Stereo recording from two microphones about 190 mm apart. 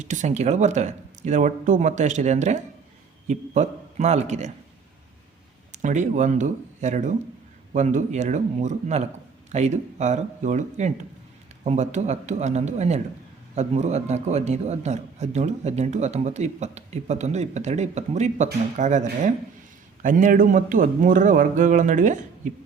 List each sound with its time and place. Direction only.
0.0 s a man's voice: 40° right (ahead or behind)
5.7 s a man's voice: 40° right (ahead or behind)